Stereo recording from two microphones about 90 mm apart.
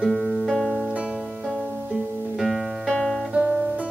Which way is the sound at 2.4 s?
Centre (ahead or behind).